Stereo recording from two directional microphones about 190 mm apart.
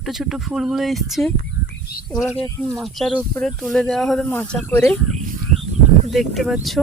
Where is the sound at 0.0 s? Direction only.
Centre (ahead or behind).